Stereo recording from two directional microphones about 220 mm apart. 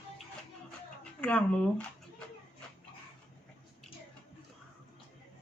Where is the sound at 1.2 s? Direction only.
5° left (ahead or behind).